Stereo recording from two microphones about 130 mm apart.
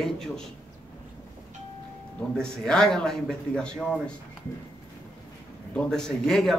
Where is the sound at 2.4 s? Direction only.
5° left (ahead or behind).